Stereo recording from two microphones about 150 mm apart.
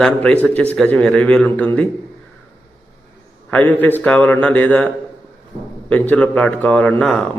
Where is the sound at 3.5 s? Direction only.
10° left (ahead or behind).